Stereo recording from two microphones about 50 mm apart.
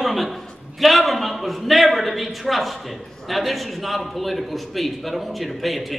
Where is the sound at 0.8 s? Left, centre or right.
Centre.